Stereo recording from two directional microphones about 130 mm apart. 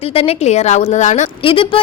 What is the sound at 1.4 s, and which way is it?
Speech, 45° left (ahead or behind).